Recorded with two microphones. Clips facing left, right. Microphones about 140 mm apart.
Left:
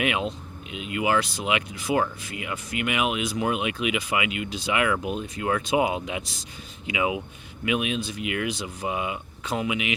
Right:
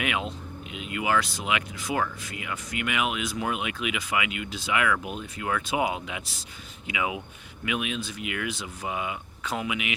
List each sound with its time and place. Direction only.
0.0 s speech: 25° left (ahead or behind)